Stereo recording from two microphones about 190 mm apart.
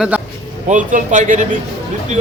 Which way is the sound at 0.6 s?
40° right (ahead or behind).